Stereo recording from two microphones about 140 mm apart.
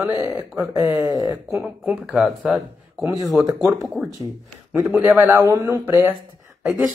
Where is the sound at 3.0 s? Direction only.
25° right (ahead or behind).